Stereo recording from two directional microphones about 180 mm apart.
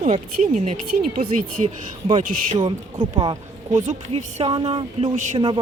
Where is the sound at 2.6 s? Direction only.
25° right (ahead or behind).